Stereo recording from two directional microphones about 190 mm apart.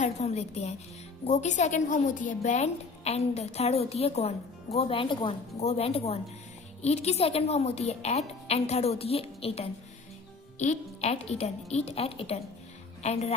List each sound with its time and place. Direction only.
0.0 s a woman's voice: 35° left (ahead or behind)